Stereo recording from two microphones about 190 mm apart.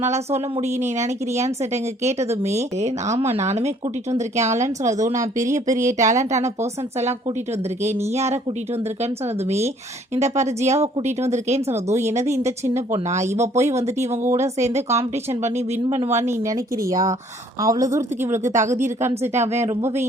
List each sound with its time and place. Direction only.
0.0 s speech: 35° right (ahead or behind)
7.9 s speech: 35° right (ahead or behind)
10.2 s speech: 35° right (ahead or behind)
11.7 s speech: 15° right (ahead or behind)
12.0 s speech: 35° right (ahead or behind)
16.2 s speech: 20° right (ahead or behind)
19.6 s speech: 15° right (ahead or behind)